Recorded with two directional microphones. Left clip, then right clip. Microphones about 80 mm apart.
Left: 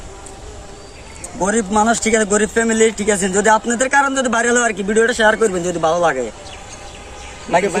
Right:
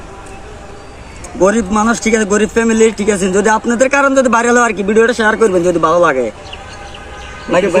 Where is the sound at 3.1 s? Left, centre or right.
Left.